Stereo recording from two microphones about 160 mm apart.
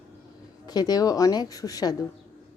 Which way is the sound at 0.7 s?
25° left (ahead or behind).